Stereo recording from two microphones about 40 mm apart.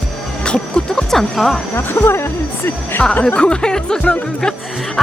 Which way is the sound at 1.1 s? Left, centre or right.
Centre.